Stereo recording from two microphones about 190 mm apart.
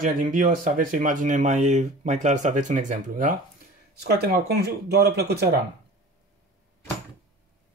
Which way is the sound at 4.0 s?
55° right (ahead or behind).